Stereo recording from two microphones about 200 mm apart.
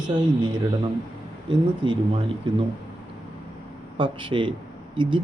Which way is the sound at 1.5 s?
25° right (ahead or behind).